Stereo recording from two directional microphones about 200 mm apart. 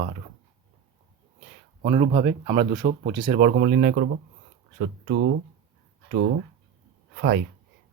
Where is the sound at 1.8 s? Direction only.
30° right (ahead or behind).